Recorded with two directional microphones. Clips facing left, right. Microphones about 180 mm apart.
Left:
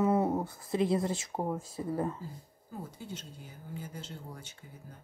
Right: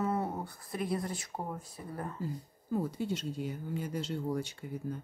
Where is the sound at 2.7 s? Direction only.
70° right (ahead or behind).